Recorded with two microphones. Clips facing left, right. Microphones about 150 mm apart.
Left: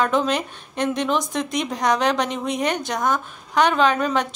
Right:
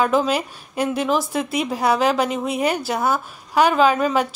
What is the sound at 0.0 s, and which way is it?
A woman's voice, 5° right (ahead or behind).